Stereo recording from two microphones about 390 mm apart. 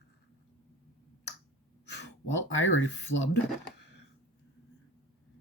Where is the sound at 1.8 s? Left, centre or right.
Left.